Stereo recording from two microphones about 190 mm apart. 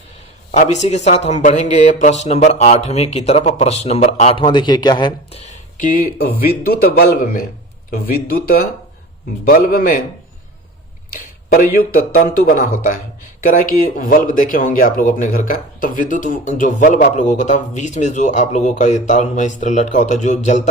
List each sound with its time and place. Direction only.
0.5 s speech: 35° left (ahead or behind)
5.7 s speech: 45° left (ahead or behind)
11.4 s speech: 50° left (ahead or behind)
13.5 s speech: 45° left (ahead or behind)